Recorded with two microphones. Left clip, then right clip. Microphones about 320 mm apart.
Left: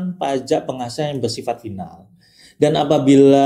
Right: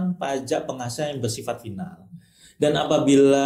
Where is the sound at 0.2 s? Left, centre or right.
Left.